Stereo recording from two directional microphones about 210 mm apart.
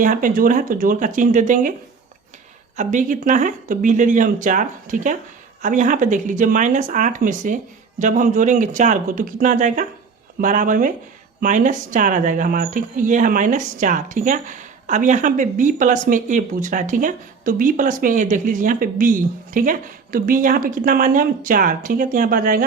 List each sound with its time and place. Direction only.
0.0 s speech: 40° right (ahead or behind)
2.7 s speech: 35° right (ahead or behind)